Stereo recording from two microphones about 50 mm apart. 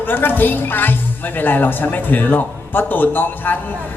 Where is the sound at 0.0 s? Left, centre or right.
Left.